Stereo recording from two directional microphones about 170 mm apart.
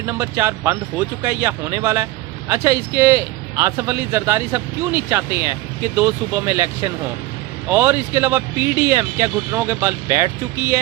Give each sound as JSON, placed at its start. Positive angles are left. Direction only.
{"t": 0.0, "sound": "a man's voice", "side_deg": -15}
{"t": 7.7, "sound": "a man's voice", "side_deg": -15}